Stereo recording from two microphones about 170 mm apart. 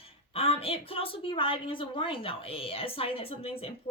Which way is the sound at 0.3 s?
35° left (ahead or behind).